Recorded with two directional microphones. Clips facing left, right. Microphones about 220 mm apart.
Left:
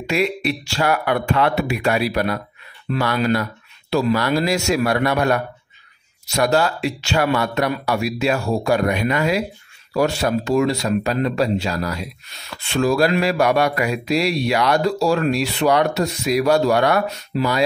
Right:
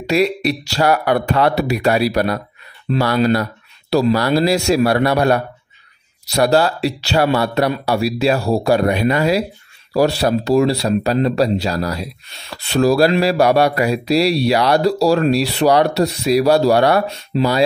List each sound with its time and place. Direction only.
0.0 s speech: 40° right (ahead or behind)